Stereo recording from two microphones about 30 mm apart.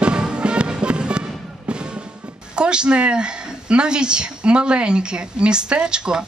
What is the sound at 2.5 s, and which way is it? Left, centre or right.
A woman's voice, right.